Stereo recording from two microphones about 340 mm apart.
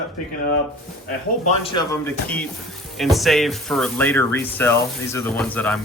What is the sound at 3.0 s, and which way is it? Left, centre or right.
Speech, centre.